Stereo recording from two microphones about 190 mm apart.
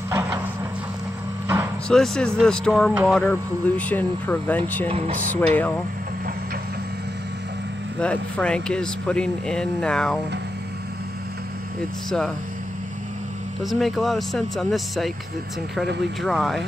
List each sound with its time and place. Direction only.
0.1 s a sound: 15° right (ahead or behind)
1.9 s speech: 5° left (ahead or behind)
2.9 s speech: 10° right (ahead or behind)
3.2 s speech: 10° left (ahead or behind)
4.8 s speech: 30° right (ahead or behind)
5.3 s speech: 10° left (ahead or behind)
8.0 s speech: 5° left (ahead or behind)
13.6 s speech: centre (ahead or behind)
16.2 s speech: centre (ahead or behind)